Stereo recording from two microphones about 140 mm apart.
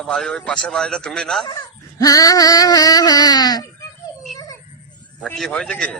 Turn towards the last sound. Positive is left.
turn(degrees=5)  # may be behind; listen again after turning